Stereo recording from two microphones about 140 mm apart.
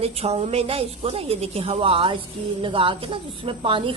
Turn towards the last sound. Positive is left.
turn(degrees=-40)  # may be behind; listen again after turning